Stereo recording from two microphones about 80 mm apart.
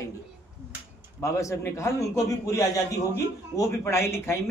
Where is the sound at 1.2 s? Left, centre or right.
Left.